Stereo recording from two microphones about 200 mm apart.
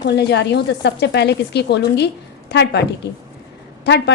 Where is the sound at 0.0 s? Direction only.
55° left (ahead or behind).